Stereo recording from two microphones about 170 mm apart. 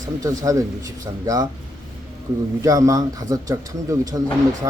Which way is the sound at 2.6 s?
20° right (ahead or behind).